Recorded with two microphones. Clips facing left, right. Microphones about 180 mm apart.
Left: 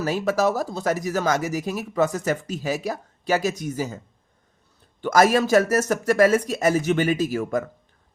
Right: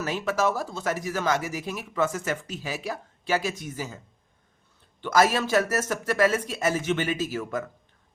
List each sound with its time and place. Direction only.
0.0 s speech: 40° left (ahead or behind)